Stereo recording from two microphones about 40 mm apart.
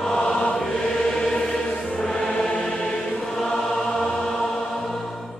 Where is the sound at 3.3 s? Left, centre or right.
Centre.